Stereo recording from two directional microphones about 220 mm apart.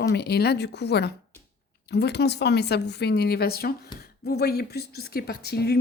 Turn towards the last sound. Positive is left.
turn(degrees=45)  # may be behind; listen again after turning